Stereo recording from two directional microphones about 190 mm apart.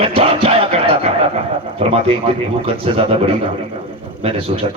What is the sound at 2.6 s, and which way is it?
Speech, 30° right (ahead or behind).